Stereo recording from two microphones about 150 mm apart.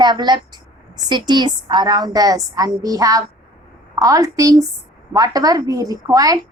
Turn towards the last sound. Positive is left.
turn(degrees=-25)  # may be behind; listen again after turning